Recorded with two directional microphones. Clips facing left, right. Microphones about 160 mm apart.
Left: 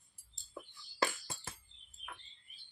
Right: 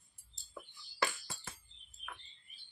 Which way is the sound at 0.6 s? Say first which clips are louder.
Left 1 dB; 25° left (ahead or behind).